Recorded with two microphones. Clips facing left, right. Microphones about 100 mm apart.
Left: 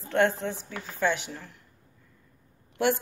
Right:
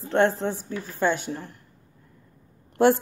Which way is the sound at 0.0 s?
30° right (ahead or behind).